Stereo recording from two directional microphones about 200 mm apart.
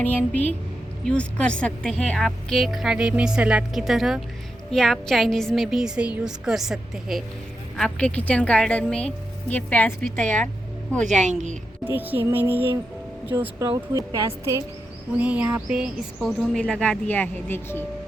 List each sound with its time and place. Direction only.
0.0 s speech: 10° left (ahead or behind)
11.0 s a woman's voice: 35° right (ahead or behind)
11.9 s a woman's voice: 10° right (ahead or behind); by 17.8 s 10° left (ahead or behind)